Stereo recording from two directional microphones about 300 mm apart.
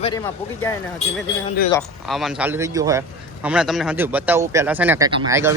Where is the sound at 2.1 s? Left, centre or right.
Centre.